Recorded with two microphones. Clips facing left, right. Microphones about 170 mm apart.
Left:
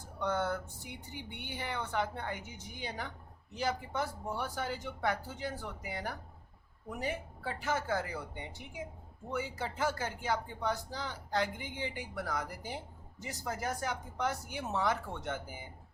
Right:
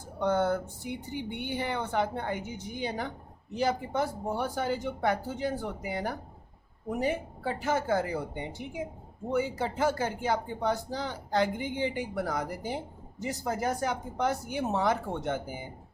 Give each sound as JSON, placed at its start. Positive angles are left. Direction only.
{"t": 0.2, "sound": "speech", "side_deg": -25}
{"t": 12.2, "sound": "a woman's voice", "side_deg": -35}
{"t": 12.5, "sound": "speech", "side_deg": -20}